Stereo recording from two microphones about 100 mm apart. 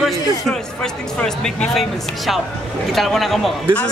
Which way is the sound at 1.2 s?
5° left (ahead or behind).